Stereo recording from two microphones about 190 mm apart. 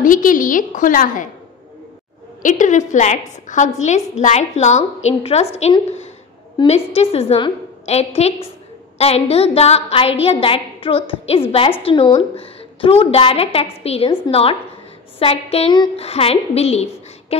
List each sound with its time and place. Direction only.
0.0 s a woman's voice: 45° left (ahead or behind)
2.4 s a woman's voice: 40° left (ahead or behind)
6.6 s a woman's voice: 25° left (ahead or behind)